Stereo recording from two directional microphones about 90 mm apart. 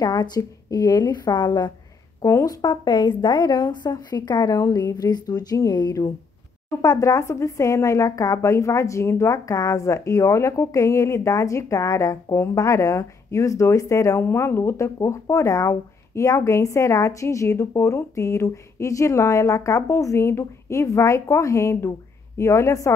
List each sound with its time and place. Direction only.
0.0 s a woman's voice: 50° left (ahead or behind)
2.2 s speech: 35° left (ahead or behind)
2.6 s a woman's voice: 55° left (ahead or behind); by 22.9 s 35° left (ahead or behind)